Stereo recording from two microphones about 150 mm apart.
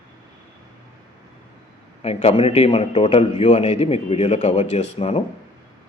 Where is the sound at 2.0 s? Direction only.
40° left (ahead or behind).